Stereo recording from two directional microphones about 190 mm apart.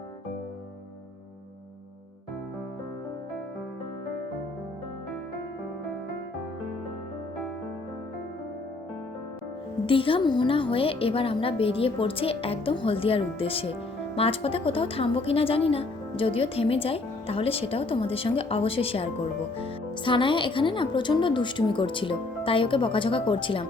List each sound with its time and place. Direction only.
9.8 s a woman's voice: 30° left (ahead or behind)